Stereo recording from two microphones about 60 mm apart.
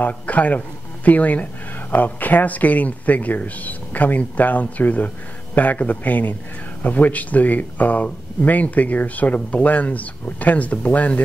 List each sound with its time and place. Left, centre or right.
0.0 s speech: left